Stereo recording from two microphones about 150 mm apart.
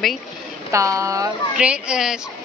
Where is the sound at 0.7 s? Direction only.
20° right (ahead or behind).